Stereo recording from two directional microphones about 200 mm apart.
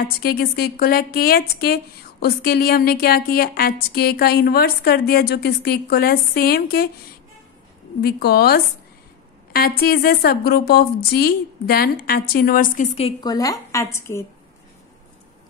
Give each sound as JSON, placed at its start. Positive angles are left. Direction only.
{"t": 0.2, "sound": "speech", "side_deg": 50}
{"t": 8.0, "sound": "speech", "side_deg": 50}
{"t": 13.3, "sound": "a woman's voice", "side_deg": 15}